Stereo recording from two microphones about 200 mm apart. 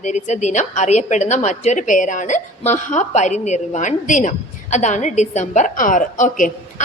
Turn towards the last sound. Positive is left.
turn(degrees=40)  # may be behind; listen again after turning